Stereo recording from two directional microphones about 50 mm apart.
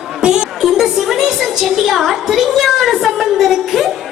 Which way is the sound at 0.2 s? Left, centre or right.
Centre.